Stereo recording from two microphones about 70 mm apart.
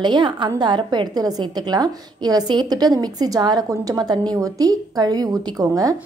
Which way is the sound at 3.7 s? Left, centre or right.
Right.